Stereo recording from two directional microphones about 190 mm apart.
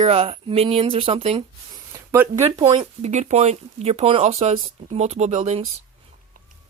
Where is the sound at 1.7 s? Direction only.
20° right (ahead or behind).